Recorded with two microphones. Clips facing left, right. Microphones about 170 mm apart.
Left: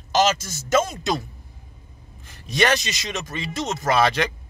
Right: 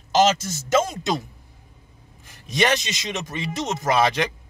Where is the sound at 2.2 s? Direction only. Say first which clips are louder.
Left 1 dB; 15° right (ahead or behind).